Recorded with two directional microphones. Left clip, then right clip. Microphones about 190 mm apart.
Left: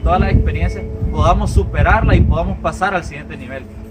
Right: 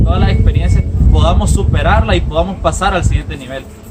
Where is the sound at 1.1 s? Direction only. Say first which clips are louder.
Even; 10° right (ahead or behind).